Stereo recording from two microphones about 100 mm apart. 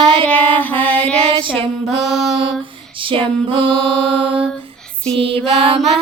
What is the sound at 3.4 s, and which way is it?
Mantra, 60° right (ahead or behind).